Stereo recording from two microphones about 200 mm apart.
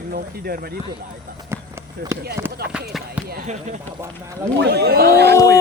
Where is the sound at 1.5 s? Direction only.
15° right (ahead or behind).